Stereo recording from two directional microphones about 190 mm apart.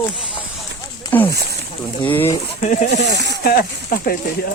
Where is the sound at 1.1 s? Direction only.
10° left (ahead or behind).